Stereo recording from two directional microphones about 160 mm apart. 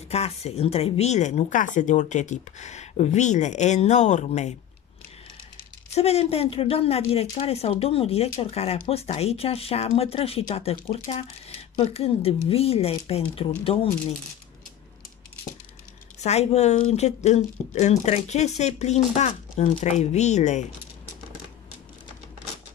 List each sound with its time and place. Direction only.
0.1 s speech: 40° left (ahead or behind)
5.9 s speech: 40° left (ahead or behind)
16.2 s speech: 45° left (ahead or behind)